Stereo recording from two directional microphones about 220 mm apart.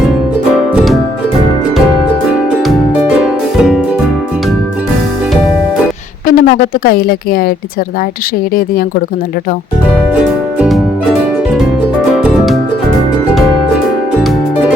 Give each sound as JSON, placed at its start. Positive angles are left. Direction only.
{"t": 3.6, "sound": "music", "side_deg": -5}
{"t": 6.2, "sound": "a woman's voice", "side_deg": 40}
{"t": 10.2, "sound": "music", "side_deg": -5}